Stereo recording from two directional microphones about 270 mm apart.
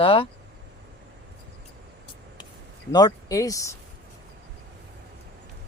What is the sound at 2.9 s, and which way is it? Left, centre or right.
Speech, centre.